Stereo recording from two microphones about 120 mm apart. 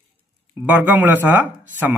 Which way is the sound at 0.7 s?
15° right (ahead or behind).